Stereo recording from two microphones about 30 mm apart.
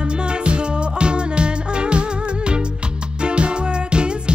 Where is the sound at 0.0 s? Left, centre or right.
Right.